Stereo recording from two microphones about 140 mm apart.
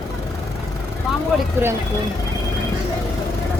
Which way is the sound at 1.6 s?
15° right (ahead or behind).